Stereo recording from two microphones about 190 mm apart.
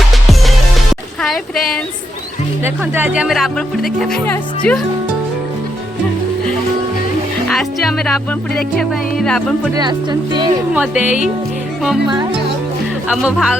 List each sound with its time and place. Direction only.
1.2 s a woman's voice: centre (ahead or behind)
2.6 s speech: 10° right (ahead or behind); by 4.8 s 5° left (ahead or behind)
7.4 s speech: centre (ahead or behind)
9.7 s speech: 20° right (ahead or behind)
10.8 s speech: 5° right (ahead or behind)
12.0 s speech: 20° right (ahead or behind)
13.1 s speech: 5° right (ahead or behind)